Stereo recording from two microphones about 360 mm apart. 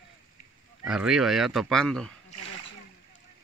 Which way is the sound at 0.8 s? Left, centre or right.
Centre.